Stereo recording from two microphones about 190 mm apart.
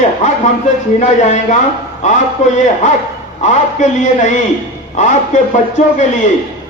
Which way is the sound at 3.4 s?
40° left (ahead or behind).